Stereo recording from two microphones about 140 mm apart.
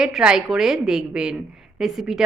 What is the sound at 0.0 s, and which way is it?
A woman's voice, 5° right (ahead or behind).